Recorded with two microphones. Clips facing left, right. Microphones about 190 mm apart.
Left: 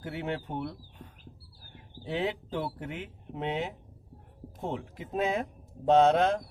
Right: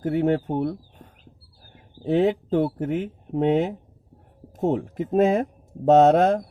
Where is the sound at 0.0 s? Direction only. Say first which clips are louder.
Right 13 dB; 45° right (ahead or behind).